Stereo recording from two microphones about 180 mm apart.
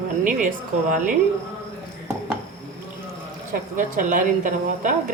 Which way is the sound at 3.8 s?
45° right (ahead or behind).